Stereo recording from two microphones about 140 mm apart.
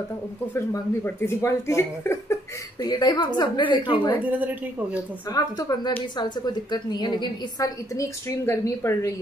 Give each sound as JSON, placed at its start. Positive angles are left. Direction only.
{"t": 0.6, "sound": "a woman's voice", "side_deg": 20}
{"t": 2.8, "sound": "a woman's voice", "side_deg": 30}
{"t": 4.2, "sound": "a woman's voice", "side_deg": -10}
{"t": 5.3, "sound": "a woman's voice", "side_deg": 25}